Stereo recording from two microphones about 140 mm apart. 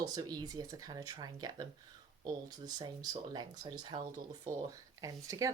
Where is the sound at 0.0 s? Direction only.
30° right (ahead or behind).